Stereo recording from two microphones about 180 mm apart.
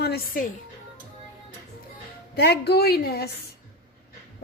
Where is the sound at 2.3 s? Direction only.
65° left (ahead or behind).